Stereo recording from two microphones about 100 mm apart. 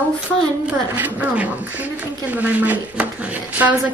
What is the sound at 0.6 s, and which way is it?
A woman's voice, 15° right (ahead or behind).